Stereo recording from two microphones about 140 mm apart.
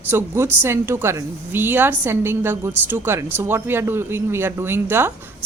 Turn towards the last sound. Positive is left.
turn(degrees=-15)  # may be behind; listen again after turning